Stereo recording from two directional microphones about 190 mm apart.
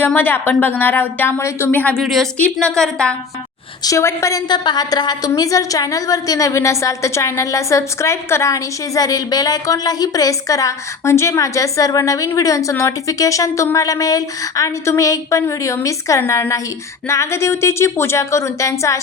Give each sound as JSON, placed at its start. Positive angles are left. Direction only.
{"t": 0.0, "sound": "a woman's voice", "side_deg": 10}
{"t": 3.8, "sound": "a woman's voice", "side_deg": 15}